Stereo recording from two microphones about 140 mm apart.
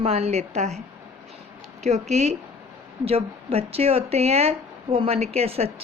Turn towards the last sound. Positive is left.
turn(degrees=-45)  # may be behind; listen again after turning